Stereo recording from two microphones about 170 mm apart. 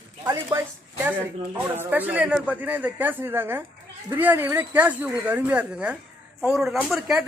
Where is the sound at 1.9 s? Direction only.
10° right (ahead or behind).